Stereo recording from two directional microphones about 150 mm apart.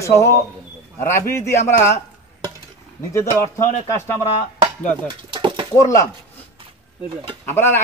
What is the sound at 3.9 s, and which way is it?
Speech, 15° left (ahead or behind).